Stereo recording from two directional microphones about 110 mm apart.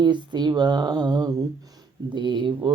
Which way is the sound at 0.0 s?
40° right (ahead or behind).